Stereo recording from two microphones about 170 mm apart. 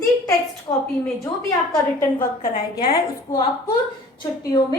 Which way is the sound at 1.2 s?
20° left (ahead or behind).